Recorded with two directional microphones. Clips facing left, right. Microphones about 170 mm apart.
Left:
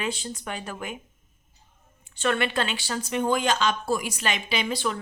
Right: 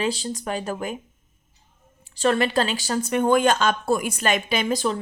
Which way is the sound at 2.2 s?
35° right (ahead or behind).